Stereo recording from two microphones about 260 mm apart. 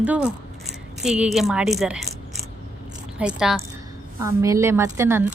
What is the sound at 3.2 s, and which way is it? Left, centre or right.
A woman's voice, centre.